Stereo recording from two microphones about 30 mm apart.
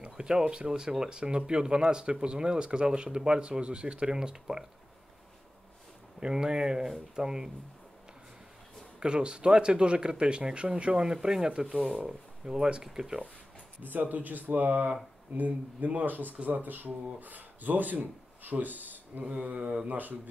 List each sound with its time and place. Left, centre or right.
0.0 s speech: right
6.1 s speech: right
9.0 s speech: right
11.0 s speech: right
13.8 s speech: right
19.3 s mantra: right
19.9 s speech: right